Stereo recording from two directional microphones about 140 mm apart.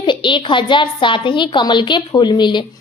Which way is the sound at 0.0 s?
35° left (ahead or behind).